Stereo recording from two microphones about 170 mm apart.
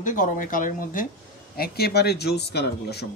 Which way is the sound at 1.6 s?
70° left (ahead or behind).